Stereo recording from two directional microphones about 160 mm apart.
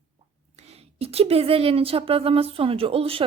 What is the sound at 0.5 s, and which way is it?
A woman's voice, 40° right (ahead or behind).